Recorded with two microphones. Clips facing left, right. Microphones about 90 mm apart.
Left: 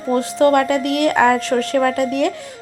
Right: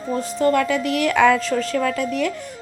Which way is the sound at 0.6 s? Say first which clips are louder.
Left 3 dB; 55° left (ahead or behind).